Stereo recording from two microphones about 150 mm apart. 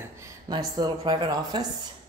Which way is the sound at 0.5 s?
25° right (ahead or behind).